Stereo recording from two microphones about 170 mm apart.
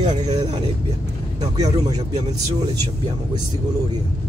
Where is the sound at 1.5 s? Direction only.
20° right (ahead or behind).